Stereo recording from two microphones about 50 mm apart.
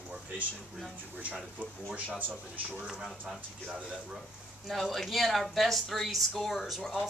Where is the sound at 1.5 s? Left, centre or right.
Right.